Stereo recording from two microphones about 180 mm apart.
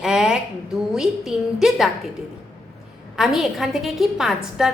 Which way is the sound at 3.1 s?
Centre (ahead or behind).